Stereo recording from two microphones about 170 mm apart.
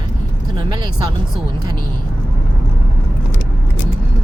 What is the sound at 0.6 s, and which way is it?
Speech, 25° right (ahead or behind).